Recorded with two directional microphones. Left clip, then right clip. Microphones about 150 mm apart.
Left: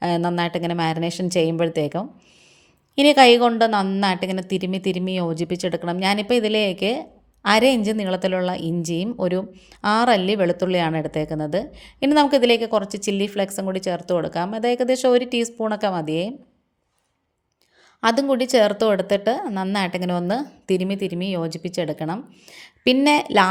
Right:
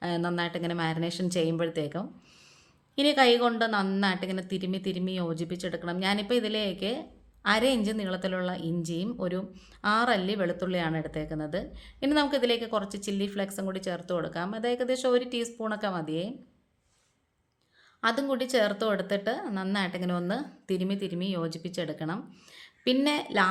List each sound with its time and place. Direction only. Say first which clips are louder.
0.0 s a woman's voice: left 9 dB; 40° left (ahead or behind)
18.0 s a woman's voice: left 9 dB; 45° left (ahead or behind)
22.4 s a sound: left 9 dB; 45° left (ahead or behind)
23.0 s a woman's voice: left 11 dB; 45° left (ahead or behind)